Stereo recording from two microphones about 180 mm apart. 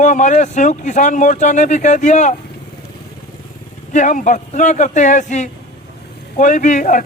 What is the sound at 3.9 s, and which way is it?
Speech, 45° left (ahead or behind).